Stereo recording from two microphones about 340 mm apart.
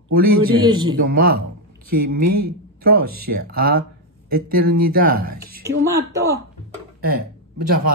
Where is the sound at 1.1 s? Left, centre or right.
Right.